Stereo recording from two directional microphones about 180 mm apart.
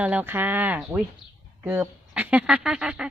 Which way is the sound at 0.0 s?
10° right (ahead or behind).